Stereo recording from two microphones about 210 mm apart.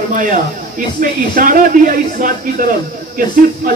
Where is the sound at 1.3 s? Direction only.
40° right (ahead or behind).